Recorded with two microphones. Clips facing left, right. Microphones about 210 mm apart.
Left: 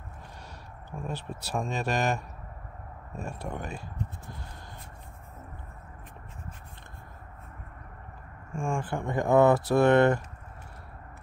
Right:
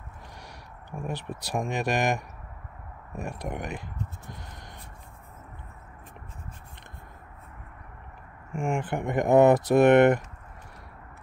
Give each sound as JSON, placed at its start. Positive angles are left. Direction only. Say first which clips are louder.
{"t": 1.0, "sound": "speech", "louder": "right 2 dB", "side_deg": -15}
{"t": 8.5, "sound": "speech", "louder": "right 3 dB", "side_deg": -20}